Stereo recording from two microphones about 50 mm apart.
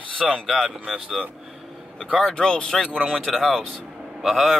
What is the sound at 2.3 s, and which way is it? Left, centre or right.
Speech, centre.